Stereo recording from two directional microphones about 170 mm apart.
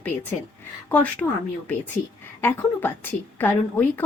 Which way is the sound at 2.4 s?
15° left (ahead or behind).